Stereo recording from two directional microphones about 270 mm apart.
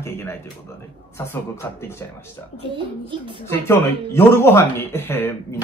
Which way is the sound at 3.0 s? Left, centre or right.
Centre.